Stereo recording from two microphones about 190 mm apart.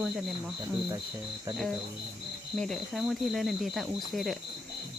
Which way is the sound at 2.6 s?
Centre (ahead or behind).